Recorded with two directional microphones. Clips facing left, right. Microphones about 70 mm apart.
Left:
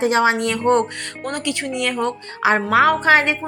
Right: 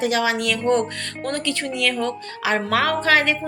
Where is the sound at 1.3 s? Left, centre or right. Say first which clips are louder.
Left 1 dB; centre.